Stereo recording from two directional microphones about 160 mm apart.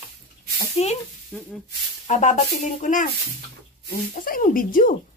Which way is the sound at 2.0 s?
50° left (ahead or behind).